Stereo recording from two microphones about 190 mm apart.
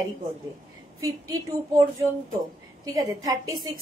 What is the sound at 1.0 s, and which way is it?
Speech, 20° right (ahead or behind).